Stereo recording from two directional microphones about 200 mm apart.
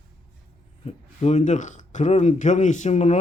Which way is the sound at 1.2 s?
35° left (ahead or behind).